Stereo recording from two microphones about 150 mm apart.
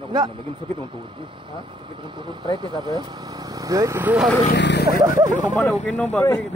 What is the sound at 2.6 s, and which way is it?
Speech, 30° right (ahead or behind).